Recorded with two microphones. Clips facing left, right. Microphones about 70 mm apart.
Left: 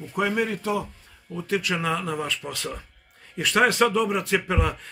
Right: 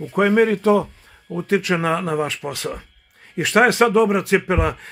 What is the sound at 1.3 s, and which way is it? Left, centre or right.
Speech, right.